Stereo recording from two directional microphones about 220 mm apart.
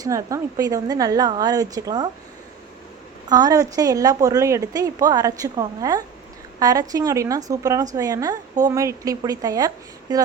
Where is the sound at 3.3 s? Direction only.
15° right (ahead or behind).